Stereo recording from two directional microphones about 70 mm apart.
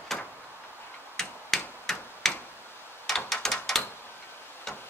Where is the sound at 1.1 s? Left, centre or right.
Centre.